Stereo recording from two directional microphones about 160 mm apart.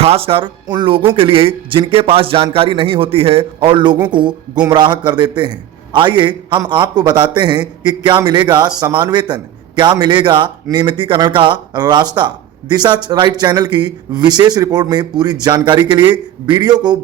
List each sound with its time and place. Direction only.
0.0 s a man's voice: 35° right (ahead or behind)